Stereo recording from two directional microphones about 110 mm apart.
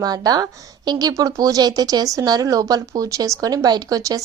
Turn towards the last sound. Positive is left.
turn(degrees=-35)  # may be behind; listen again after turning